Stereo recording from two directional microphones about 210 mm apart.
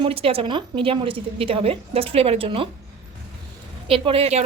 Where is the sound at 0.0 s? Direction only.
25° right (ahead or behind).